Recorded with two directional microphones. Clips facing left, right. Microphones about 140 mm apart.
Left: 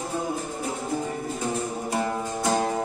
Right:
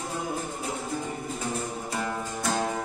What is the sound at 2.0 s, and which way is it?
Music, 25° left (ahead or behind).